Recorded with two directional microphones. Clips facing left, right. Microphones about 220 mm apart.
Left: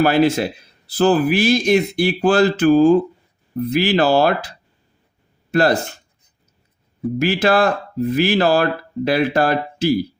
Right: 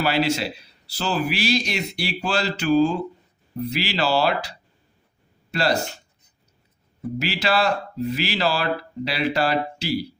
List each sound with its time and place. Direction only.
0.0 s speech: 50° left (ahead or behind)
7.2 s speech: 50° left (ahead or behind)